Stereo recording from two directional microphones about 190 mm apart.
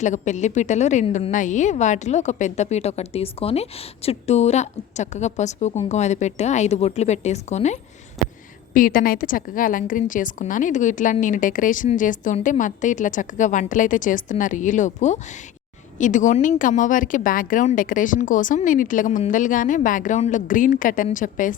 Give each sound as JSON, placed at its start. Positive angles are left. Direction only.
{"t": 0.0, "sound": "a woman's voice", "side_deg": 40}
{"t": 8.2, "sound": "a sound", "side_deg": 0}
{"t": 8.7, "sound": "a woman's voice", "side_deg": 45}